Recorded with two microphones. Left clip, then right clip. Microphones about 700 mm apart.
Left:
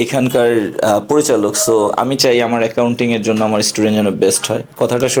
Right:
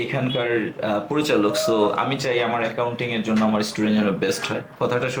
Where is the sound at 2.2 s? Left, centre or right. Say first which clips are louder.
Left 9 dB; left.